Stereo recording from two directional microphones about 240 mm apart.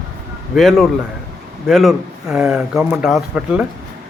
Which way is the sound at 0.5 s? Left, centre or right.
Centre.